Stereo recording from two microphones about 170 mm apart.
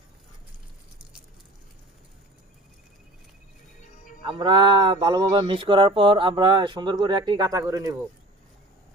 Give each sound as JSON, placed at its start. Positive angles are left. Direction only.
{"t": 4.3, "sound": "speech", "side_deg": -30}